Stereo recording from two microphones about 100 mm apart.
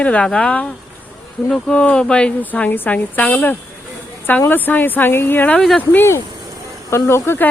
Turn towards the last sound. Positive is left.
turn(degrees=25)  # may be behind; listen again after turning